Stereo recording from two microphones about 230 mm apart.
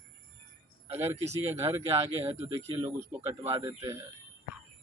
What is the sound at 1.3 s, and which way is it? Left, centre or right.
Speech, centre.